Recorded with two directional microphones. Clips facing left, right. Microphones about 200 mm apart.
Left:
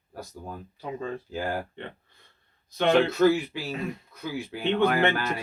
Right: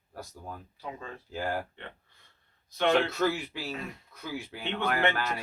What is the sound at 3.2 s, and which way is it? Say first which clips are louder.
Speech: left 8 dB; 5° left (ahead or behind).